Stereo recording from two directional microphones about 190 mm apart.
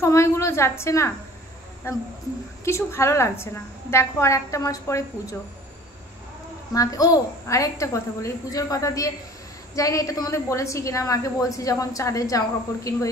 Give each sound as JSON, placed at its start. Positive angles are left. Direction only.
{"t": 0.0, "sound": "a woman's voice", "side_deg": 15}
{"t": 6.7, "sound": "a woman's voice", "side_deg": 20}